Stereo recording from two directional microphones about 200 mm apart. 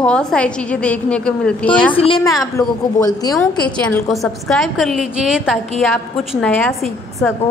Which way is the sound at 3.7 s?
5° left (ahead or behind).